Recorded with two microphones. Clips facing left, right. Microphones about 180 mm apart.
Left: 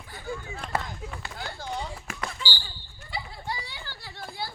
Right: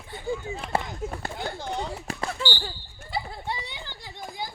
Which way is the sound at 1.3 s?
20° right (ahead or behind).